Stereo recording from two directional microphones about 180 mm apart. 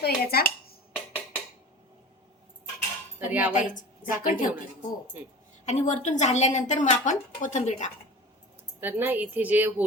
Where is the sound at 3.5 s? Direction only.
45° left (ahead or behind).